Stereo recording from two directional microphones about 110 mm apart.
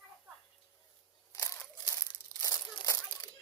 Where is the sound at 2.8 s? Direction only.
35° left (ahead or behind).